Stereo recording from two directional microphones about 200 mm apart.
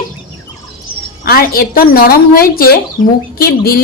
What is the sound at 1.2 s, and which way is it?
A woman's voice, 50° left (ahead or behind).